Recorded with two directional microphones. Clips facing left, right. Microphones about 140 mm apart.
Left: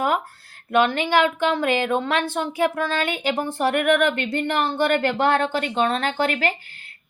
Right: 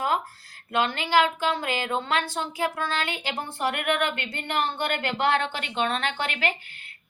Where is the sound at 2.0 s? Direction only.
60° left (ahead or behind).